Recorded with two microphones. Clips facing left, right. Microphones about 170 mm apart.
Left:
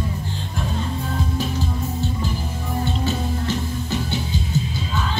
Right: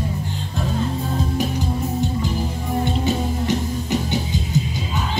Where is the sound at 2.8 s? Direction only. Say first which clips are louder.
Right 3 dB; 15° right (ahead or behind).